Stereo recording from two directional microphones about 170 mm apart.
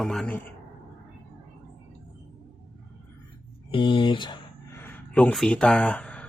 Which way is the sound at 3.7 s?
30° left (ahead or behind).